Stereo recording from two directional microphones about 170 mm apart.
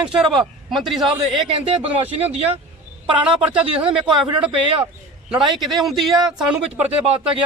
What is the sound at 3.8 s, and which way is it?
Speech, 30° right (ahead or behind).